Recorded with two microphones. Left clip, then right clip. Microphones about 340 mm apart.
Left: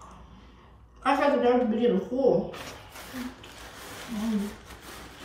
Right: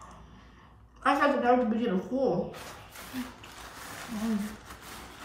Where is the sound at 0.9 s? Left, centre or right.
Centre.